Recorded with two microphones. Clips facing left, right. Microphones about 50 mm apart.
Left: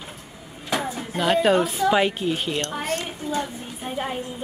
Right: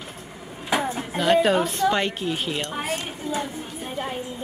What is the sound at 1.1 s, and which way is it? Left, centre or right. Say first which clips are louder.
A woman's voice: even; centre.